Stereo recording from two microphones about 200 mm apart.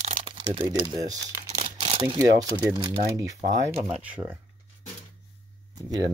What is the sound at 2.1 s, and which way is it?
Speech, 15° right (ahead or behind).